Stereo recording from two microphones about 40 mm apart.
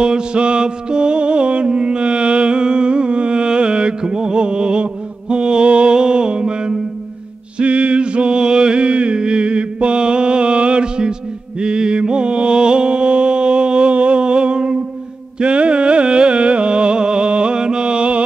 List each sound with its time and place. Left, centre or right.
0.0 s music: right
7.5 s a sound: right
11.6 s mantra: right
15.3 s music: right